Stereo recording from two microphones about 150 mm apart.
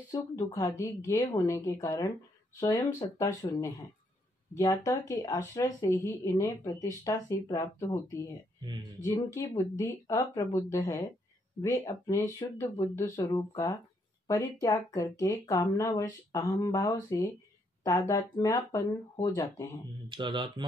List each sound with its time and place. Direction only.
0.1 s speech: 20° left (ahead or behind)
4.6 s speech: 20° left (ahead or behind)
20.1 s speech: 30° right (ahead or behind)